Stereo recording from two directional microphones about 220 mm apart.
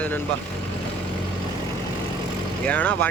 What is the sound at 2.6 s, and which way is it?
Speech, 5° left (ahead or behind).